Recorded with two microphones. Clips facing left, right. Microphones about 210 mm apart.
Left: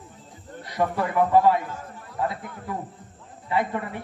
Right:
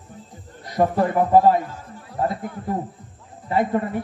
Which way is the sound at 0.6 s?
40° right (ahead or behind).